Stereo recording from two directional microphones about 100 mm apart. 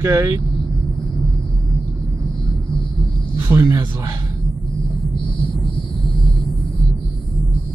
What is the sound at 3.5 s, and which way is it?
Speech, 30° right (ahead or behind).